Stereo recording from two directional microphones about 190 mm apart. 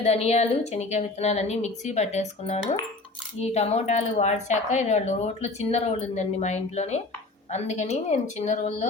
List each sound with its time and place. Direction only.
0.0 s speech: 35° left (ahead or behind)